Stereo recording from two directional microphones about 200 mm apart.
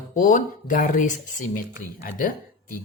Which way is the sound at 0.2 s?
40° left (ahead or behind).